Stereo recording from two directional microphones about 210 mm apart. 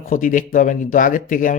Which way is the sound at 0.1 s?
40° left (ahead or behind).